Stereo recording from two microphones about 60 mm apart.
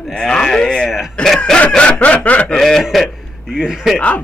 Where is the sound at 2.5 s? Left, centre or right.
Centre.